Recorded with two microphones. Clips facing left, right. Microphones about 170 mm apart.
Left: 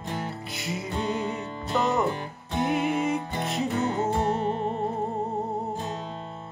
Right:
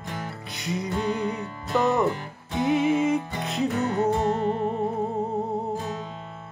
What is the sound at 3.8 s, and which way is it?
Music, 20° left (ahead or behind).